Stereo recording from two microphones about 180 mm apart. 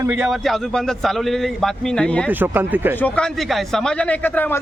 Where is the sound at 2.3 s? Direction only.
10° right (ahead or behind).